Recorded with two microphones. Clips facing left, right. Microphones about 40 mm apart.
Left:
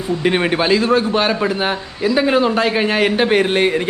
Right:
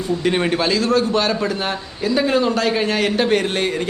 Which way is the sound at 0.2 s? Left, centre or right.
Left.